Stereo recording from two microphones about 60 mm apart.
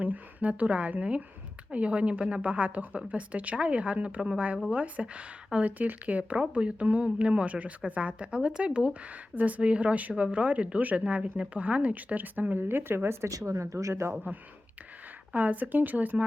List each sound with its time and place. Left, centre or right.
0.0 s a woman's voice: right
13.4 s speech: right
15.3 s a woman's voice: right